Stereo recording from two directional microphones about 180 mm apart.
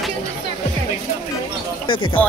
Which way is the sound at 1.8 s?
25° left (ahead or behind).